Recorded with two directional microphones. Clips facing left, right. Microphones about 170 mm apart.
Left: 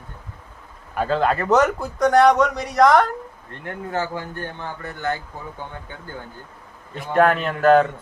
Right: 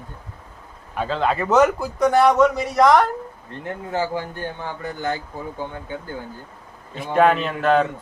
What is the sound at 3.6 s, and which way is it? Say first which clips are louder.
Speech: right 1 dB; 20° right (ahead or behind).